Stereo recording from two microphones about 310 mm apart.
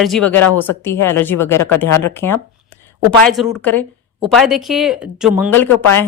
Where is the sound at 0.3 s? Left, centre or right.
Left.